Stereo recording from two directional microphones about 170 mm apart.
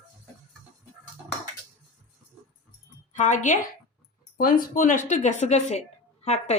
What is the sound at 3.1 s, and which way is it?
Speech, 45° left (ahead or behind).